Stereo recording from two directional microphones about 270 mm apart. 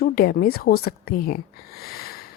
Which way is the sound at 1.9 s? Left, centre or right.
Left.